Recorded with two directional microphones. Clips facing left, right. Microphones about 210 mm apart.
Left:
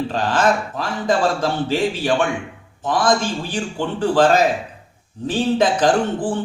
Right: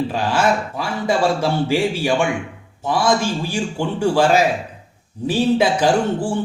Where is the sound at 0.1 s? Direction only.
10° right (ahead or behind).